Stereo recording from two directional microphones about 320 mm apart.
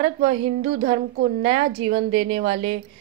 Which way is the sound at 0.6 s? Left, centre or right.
Right.